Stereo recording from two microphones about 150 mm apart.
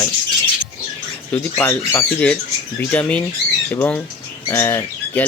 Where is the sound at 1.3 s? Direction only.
15° left (ahead or behind).